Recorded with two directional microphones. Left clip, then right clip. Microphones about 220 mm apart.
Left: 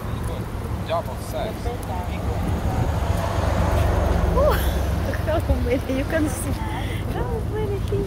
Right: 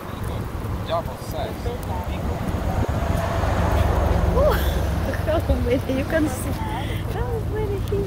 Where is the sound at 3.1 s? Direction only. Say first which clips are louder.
Right 1 dB; 55° left (ahead or behind).